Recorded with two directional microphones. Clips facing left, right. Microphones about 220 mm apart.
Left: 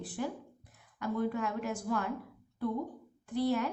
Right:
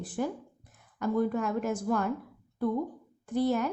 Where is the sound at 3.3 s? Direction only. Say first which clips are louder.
Right 3 dB; 45° right (ahead or behind).